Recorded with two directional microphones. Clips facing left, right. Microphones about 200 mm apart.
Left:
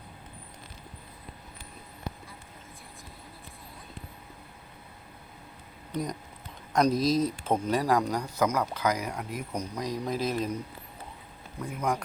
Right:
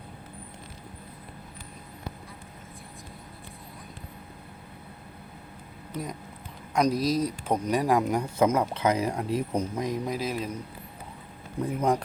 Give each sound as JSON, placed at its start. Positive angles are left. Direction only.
{"t": 5.9, "sound": "speech", "side_deg": -5}
{"t": 10.0, "sound": "speech", "side_deg": -10}
{"t": 11.6, "sound": "speech", "side_deg": -30}